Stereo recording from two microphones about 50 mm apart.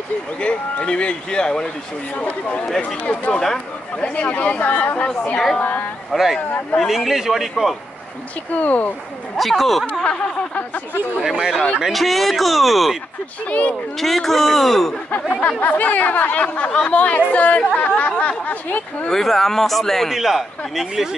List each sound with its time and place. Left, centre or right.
0.4 s speech: left
2.1 s speech: left
3.3 s speech: centre
4.0 s speech: left
6.1 s speech: centre
8.5 s speech: left
9.4 s speech: centre
10.0 s speech: left
11.2 s a man's voice: centre
11.9 s speech: centre
13.5 s speech: left
13.9 s speech: centre
15.0 s speech: left
19.0 s a man's voice: centre